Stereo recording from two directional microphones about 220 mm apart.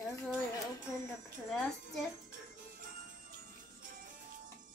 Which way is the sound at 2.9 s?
40° right (ahead or behind).